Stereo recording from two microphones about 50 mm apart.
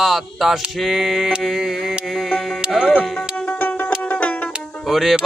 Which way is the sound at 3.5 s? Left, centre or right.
Left.